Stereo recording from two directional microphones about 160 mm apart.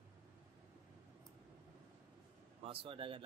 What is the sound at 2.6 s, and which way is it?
Speech, 35° right (ahead or behind).